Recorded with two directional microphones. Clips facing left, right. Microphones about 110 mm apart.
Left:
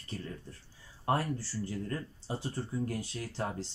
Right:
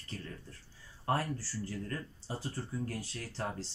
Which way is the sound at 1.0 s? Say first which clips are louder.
Left 2 dB; 20° left (ahead or behind).